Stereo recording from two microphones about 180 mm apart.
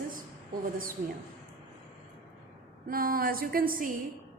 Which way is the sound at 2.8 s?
55° right (ahead or behind).